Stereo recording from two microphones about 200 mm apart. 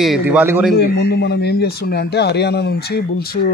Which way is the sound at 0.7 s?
55° left (ahead or behind).